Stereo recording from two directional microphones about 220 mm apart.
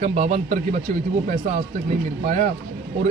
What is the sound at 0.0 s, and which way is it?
Speech, 30° right (ahead or behind).